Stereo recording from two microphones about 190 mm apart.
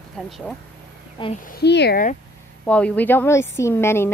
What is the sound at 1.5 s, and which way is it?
Speech, 60° left (ahead or behind).